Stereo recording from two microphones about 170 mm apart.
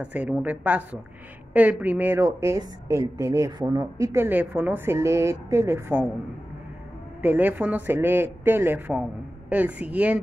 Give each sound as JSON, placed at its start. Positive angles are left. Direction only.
{"t": 0.0, "sound": "a woman's voice", "side_deg": -10}
{"t": 7.2, "sound": "a woman's voice", "side_deg": -10}